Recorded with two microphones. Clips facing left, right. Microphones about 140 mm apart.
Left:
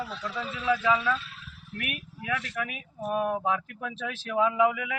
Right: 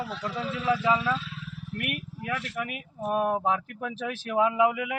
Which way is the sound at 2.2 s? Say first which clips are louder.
Left 2 dB; 5° right (ahead or behind).